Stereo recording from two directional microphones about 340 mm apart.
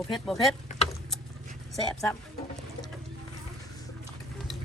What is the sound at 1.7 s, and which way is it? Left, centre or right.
Speech, centre.